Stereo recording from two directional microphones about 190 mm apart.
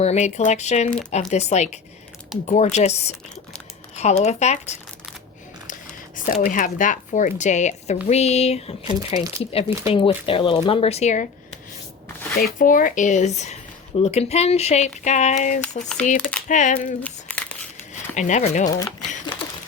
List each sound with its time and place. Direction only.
0.0 s speech: 35° left (ahead or behind)
4.2 s speech: 35° left (ahead or behind)
17.0 s crumpling: 5° left (ahead or behind)
18.1 s speech: 40° left (ahead or behind)
18.7 s speech: 20° left (ahead or behind)